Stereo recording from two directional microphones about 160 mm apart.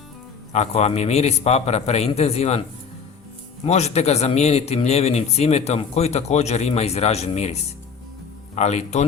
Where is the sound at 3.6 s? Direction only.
45° left (ahead or behind).